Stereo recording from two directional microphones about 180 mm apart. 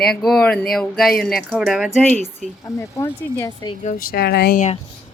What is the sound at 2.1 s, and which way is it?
Speech, 40° right (ahead or behind).